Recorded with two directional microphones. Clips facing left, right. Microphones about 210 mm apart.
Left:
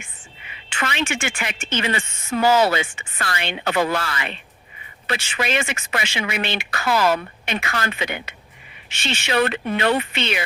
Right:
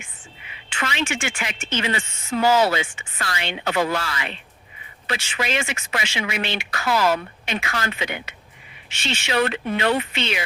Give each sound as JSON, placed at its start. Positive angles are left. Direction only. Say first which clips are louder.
{"t": 0.7, "sound": "a woman's voice", "louder": "left 1 dB", "side_deg": 55}